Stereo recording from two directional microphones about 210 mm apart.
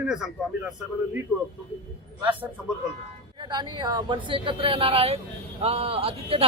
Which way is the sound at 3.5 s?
20° right (ahead or behind).